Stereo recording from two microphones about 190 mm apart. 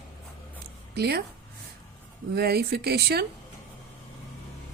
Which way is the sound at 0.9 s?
60° right (ahead or behind).